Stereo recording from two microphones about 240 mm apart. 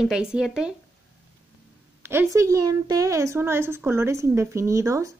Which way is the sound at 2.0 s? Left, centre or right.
Centre.